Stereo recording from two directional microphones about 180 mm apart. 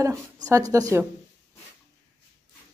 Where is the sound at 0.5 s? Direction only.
20° right (ahead or behind).